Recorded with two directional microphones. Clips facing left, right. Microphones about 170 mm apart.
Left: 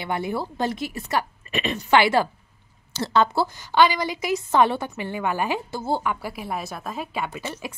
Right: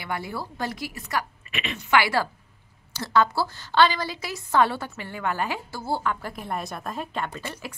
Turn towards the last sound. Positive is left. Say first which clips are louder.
# left 1 dB
turn(degrees=5)  # may be behind; listen again after turning